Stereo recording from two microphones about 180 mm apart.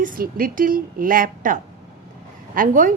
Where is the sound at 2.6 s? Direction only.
45° right (ahead or behind).